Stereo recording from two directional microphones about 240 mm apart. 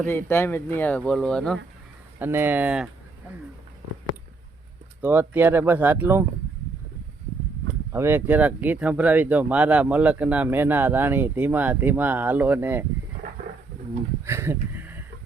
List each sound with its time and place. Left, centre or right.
0.1 s speech: centre
2.1 s speech: centre
5.0 s speech: centre
7.9 s speech: centre
14.3 s a sound: centre